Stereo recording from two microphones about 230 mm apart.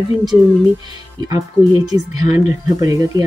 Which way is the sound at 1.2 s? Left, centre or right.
Centre.